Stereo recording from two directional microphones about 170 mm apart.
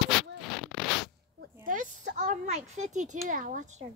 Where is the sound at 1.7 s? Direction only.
50° right (ahead or behind).